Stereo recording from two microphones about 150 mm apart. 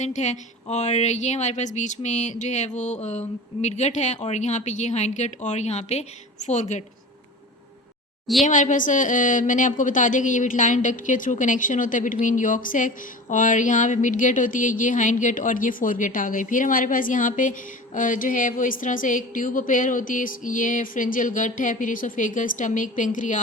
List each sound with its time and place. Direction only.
0.0 s speech: 50° left (ahead or behind)
8.4 s a woman's voice: 60° left (ahead or behind)